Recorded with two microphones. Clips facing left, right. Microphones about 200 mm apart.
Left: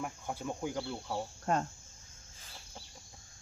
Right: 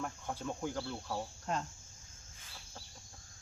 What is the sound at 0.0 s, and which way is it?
Speech, 10° left (ahead or behind).